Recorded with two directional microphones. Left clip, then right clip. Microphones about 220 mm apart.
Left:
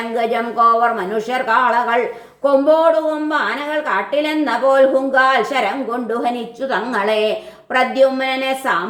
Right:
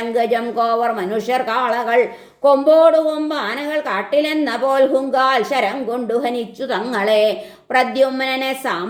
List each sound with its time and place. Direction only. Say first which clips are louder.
0.2 s a woman's voice: left 2 dB; 35° right (ahead or behind)